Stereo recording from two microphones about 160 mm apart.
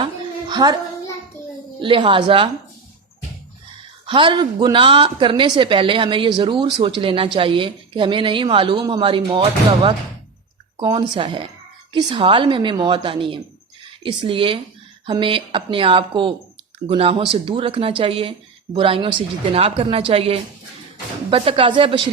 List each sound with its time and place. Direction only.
0.0 s a sound: 25° right (ahead or behind)
1.8 s speech: 30° right (ahead or behind)
4.0 s speech: 30° right (ahead or behind)